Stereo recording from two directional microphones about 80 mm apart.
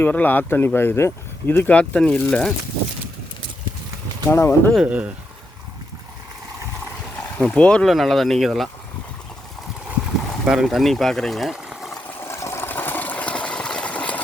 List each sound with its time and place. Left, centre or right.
0.0 s speech: left
4.3 s speech: left
4.8 s speech: centre
7.3 s speech: centre
10.4 s speech: centre
11.7 s water: centre
12.0 s a sound: left; by 14.2 s centre